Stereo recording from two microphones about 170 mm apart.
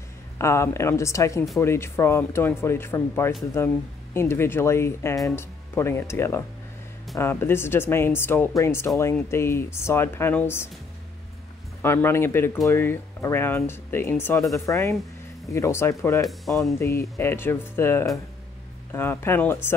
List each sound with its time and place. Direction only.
0.4 s speech: 15° left (ahead or behind)
11.8 s speech: 15° left (ahead or behind)
16.3 s speech: centre (ahead or behind)
16.8 s speech: 15° left (ahead or behind)